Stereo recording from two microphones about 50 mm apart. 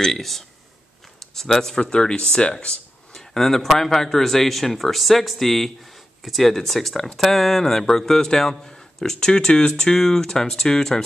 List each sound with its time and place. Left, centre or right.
0.0 s speech: centre
1.8 s speech: left
3.2 s speech: centre